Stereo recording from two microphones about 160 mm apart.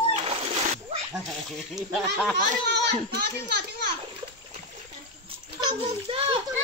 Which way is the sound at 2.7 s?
90° right.